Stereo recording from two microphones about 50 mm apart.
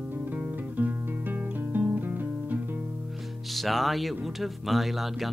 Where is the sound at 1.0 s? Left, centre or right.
Right.